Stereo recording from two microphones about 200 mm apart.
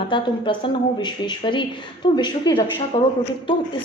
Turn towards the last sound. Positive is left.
turn(degrees=25)  # may be behind; listen again after turning